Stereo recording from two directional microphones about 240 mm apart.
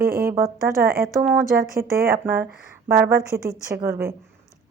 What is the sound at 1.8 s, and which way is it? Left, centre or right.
Speech, right.